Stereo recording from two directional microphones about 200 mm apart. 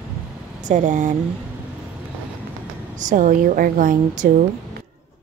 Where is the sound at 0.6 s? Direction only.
40° right (ahead or behind).